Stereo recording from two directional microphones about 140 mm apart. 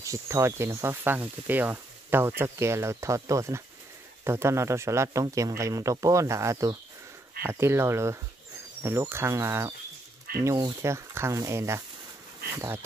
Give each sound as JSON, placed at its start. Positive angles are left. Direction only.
{"t": 0.0, "sound": "speech", "side_deg": -20}